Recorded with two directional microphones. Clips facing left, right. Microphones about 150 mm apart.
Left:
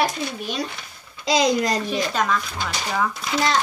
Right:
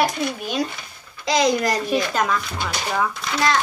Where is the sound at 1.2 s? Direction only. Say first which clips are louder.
Even; 25° left (ahead or behind).